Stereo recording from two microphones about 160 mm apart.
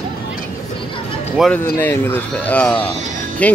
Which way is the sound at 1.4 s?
5° right (ahead or behind).